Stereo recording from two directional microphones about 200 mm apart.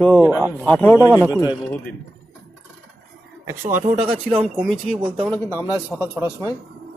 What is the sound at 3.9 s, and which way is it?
Speech, 30° right (ahead or behind).